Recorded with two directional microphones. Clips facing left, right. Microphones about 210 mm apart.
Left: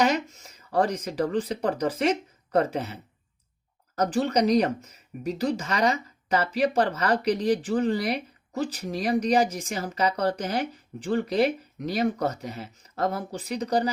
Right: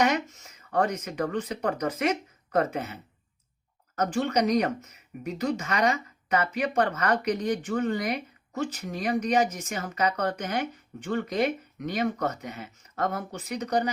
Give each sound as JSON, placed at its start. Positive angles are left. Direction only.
{"t": 0.0, "sound": "speech", "side_deg": 30}